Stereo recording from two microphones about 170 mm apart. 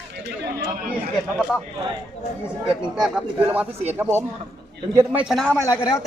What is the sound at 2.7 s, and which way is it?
Speech, 5° right (ahead or behind).